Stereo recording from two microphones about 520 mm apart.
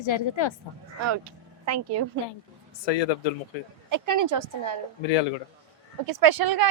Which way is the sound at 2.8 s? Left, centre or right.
Left.